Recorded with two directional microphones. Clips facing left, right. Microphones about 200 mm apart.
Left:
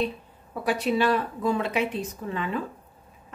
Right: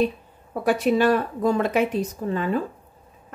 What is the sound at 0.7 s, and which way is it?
Speech, 45° right (ahead or behind).